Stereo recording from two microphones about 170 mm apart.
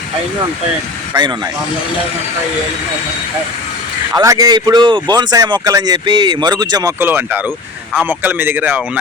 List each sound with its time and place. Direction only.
4.1 s speech: 20° right (ahead or behind)
7.0 s speech: 10° right (ahead or behind)